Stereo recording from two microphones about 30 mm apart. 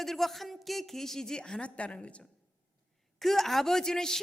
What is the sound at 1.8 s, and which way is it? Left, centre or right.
Speech, left.